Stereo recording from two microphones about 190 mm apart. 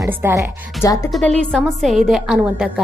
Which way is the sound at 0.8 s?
15° left (ahead or behind).